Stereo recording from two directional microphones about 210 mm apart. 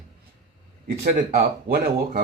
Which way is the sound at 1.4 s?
45° right (ahead or behind).